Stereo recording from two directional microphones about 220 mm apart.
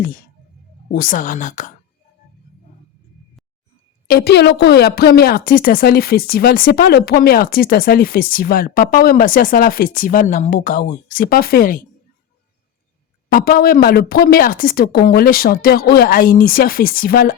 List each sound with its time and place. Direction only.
0.9 s a woman's voice: 40° left (ahead or behind)
4.1 s a woman's voice: 45° left (ahead or behind)
13.3 s a woman's voice: 45° left (ahead or behind)